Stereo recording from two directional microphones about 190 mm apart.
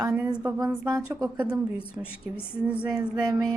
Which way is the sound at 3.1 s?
20° right (ahead or behind).